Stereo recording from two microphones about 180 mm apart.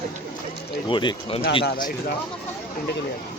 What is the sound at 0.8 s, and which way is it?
Speech, 25° left (ahead or behind).